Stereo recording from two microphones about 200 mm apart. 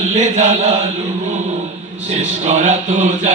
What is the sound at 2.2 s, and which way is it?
Chant, 35° right (ahead or behind).